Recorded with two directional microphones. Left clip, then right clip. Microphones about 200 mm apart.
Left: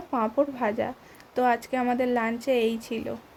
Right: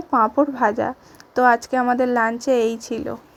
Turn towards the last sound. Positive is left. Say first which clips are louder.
# right 6 dB
turn(degrees=-25)  # may be behind; listen again after turning